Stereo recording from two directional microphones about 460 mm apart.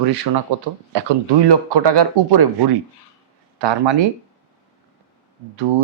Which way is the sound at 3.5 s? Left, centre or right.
Right.